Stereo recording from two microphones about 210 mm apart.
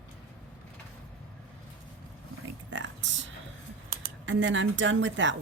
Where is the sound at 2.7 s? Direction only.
65° right (ahead or behind).